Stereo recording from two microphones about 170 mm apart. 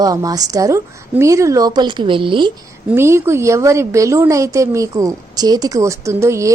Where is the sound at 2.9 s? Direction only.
15° right (ahead or behind).